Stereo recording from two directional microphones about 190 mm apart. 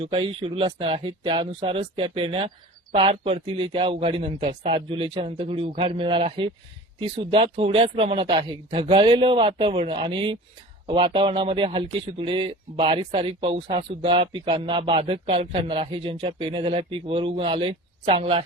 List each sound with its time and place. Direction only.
0.0 s speech: 30° right (ahead or behind)